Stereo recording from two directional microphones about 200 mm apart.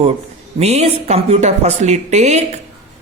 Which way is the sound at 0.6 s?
30° right (ahead or behind).